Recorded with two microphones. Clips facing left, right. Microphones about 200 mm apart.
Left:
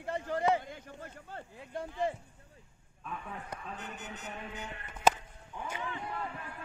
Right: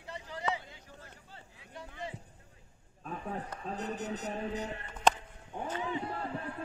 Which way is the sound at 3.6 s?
35° right (ahead or behind).